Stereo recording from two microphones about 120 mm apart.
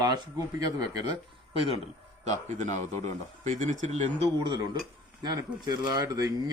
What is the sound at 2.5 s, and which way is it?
Speech, 90° right.